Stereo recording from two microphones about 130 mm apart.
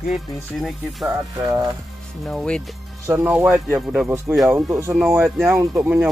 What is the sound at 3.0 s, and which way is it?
Speech, 15° right (ahead or behind).